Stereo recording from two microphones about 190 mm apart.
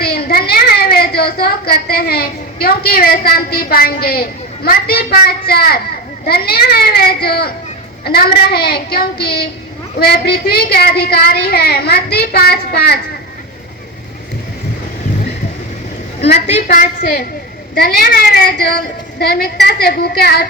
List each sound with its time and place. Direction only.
0.0 s a child's voice: 55° left (ahead or behind)
16.3 s a woman's voice: 40° left (ahead or behind); by 20.5 s 55° left (ahead or behind)